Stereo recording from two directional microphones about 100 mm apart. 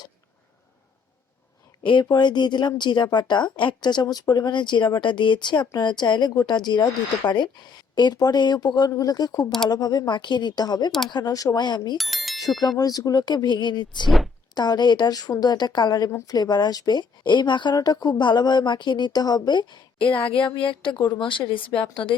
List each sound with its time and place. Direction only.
1.9 s speech: 50° left (ahead or behind)
11.9 s bicycle bell: centre (ahead or behind)
12.4 s speech: 40° left (ahead or behind)
20.0 s speech: 15° left (ahead or behind)
20.2 s speech: 60° left (ahead or behind)